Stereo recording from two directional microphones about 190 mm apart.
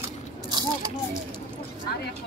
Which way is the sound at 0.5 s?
20° right (ahead or behind).